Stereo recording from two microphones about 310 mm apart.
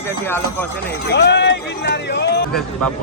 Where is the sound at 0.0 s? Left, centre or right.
Centre.